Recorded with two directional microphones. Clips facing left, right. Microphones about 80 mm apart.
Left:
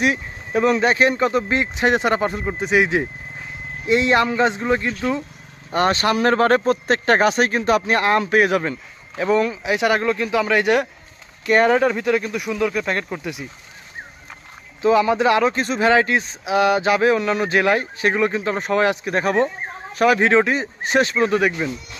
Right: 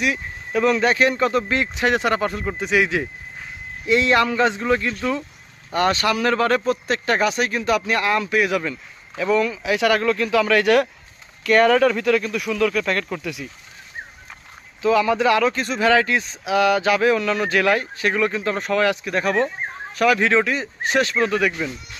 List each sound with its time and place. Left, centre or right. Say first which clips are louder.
0.0 s speech: left 3 dB; left
5.7 s speech: left 1 dB; left
14.8 s speech: left 2 dB; left